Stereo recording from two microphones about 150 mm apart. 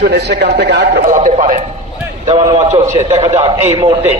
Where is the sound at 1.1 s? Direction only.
50° right (ahead or behind).